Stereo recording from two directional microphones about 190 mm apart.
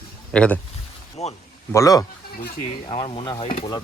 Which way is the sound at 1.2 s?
35° left (ahead or behind).